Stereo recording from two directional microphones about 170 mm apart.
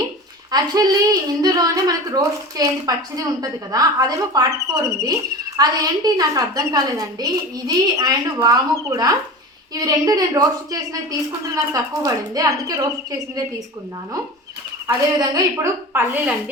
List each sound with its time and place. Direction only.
0.5 s speech: 20° right (ahead or behind)
14.8 s a woman's voice: 20° right (ahead or behind)